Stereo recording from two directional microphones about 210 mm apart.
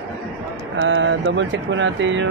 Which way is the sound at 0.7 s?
65° right (ahead or behind).